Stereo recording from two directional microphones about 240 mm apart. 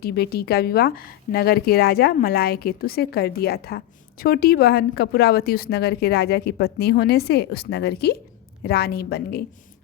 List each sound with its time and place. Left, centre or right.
0.0 s a woman's voice: left